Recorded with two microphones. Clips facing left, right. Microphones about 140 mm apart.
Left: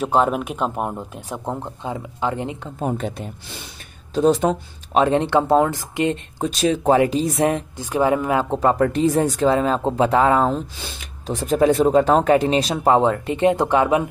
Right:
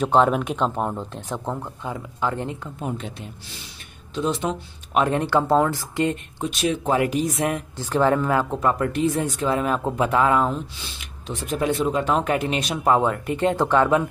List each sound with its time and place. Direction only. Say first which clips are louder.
0.0 s speech: even; 5° left (ahead or behind); by 2.7 s 20° left (ahead or behind)
2.8 s speech: left 7 dB; 50° left (ahead or behind)
4.9 s speech: left 3 dB; 25° left (ahead or behind)
6.4 s speech: left 5 dB; 35° left (ahead or behind)
7.7 s speech: left 1 dB; 10° left (ahead or behind)
8.5 s speech: left 4 dB; 30° left (ahead or behind)